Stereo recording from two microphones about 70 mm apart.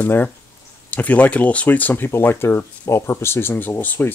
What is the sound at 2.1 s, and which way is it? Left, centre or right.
Speech, left.